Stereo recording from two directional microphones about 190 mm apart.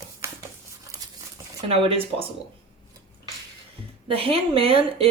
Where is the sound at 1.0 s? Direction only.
20° right (ahead or behind).